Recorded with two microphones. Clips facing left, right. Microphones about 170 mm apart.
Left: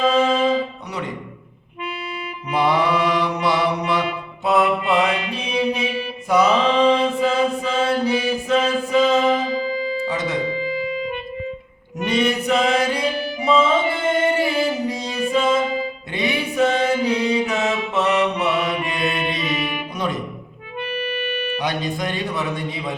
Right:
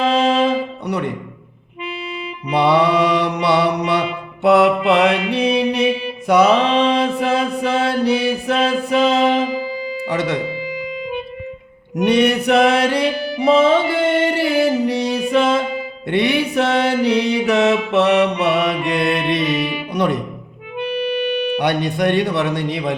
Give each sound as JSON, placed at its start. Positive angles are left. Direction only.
{"t": 0.0, "sound": "music", "side_deg": -75}
{"t": 0.9, "sound": "speech", "side_deg": -65}
{"t": 2.5, "sound": "mantra", "side_deg": -70}
{"t": 9.5, "sound": "music", "side_deg": -10}
{"t": 10.1, "sound": "music", "side_deg": -70}
{"t": 12.0, "sound": "music", "side_deg": -65}
{"t": 16.0, "sound": "mantra", "side_deg": -65}
{"t": 18.9, "sound": "music", "side_deg": -70}
{"t": 21.6, "sound": "a man's voice", "side_deg": -65}